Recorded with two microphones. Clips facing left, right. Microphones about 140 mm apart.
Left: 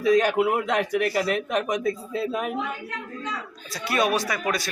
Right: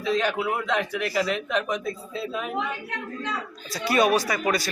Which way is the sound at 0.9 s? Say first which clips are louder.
Left 2 dB; 50° left (ahead or behind).